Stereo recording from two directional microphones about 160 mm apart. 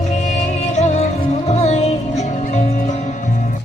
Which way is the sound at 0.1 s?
45° left (ahead or behind).